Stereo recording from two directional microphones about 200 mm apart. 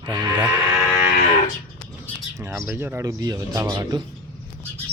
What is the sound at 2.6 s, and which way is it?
Speech, 10° right (ahead or behind).